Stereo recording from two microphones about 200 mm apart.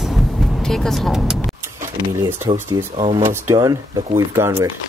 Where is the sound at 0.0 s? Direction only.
Centre (ahead or behind).